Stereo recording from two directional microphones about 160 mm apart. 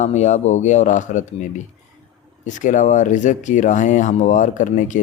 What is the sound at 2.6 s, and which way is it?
Speech, 50° left (ahead or behind).